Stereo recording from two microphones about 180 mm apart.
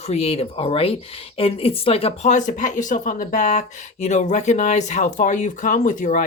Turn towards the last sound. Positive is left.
turn(degrees=45)  # may be behind; listen again after turning